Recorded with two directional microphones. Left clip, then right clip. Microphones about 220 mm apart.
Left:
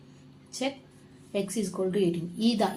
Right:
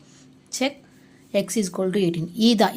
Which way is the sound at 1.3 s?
50° right (ahead or behind).